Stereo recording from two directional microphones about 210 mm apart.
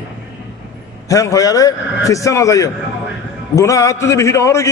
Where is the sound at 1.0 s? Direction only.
15° left (ahead or behind).